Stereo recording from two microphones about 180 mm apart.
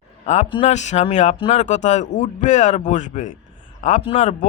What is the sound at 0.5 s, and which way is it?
Speech, 35° left (ahead or behind).